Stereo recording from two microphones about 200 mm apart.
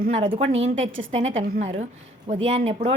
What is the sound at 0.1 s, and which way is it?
Speech, 30° right (ahead or behind).